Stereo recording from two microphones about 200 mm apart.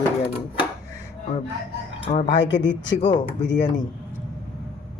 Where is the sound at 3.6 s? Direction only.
20° left (ahead or behind).